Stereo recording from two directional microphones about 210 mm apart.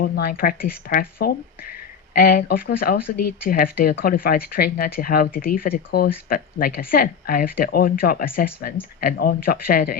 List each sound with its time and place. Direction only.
0.0 s speech: 45° left (ahead or behind)